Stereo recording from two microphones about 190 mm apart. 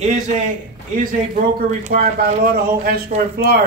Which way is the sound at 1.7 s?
45° right (ahead or behind).